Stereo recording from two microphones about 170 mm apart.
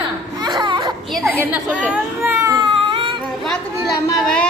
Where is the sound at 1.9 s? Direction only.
15° right (ahead or behind).